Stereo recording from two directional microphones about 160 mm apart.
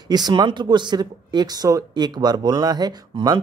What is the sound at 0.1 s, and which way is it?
Speech, 25° right (ahead or behind).